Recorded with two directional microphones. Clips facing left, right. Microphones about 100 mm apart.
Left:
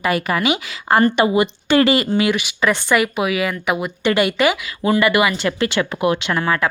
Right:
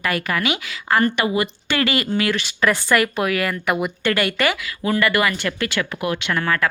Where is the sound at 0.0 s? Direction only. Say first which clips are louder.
Left 4 dB; 20° left (ahead or behind).